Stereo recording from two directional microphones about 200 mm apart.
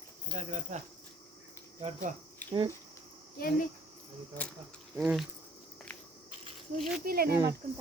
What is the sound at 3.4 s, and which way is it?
Speech, 45° left (ahead or behind).